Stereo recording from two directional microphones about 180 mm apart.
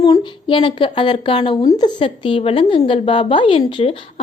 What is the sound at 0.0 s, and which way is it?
A woman's voice, 25° left (ahead or behind).